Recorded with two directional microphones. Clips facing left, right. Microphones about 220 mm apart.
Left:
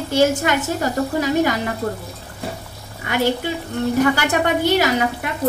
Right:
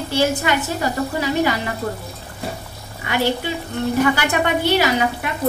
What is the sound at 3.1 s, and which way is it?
A woman's voice, 50° left (ahead or behind).